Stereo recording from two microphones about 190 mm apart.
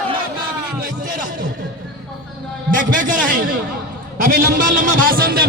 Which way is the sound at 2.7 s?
45° right (ahead or behind).